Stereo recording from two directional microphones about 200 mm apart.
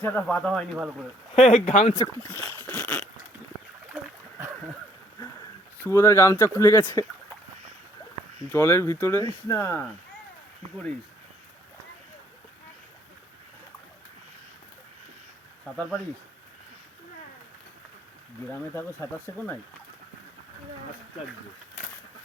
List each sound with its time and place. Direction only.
0.0 s speech: 10° left (ahead or behind)
0.8 s speech: 5° right (ahead or behind)
1.4 s speech: 30° left (ahead or behind)
2.0 s speech: 15° left (ahead or behind)
3.9 s a sound: 10° right (ahead or behind)
5.8 s speech: 15° left (ahead or behind)
8.5 s speech: 10° left (ahead or behind)
18.7 s speech: 10° left (ahead or behind)